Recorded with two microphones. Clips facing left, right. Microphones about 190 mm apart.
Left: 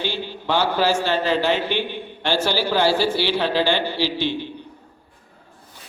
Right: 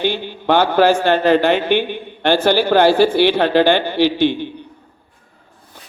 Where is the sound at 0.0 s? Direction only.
55° right (ahead or behind).